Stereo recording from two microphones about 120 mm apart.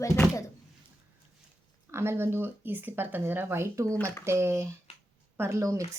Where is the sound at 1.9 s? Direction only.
20° right (ahead or behind).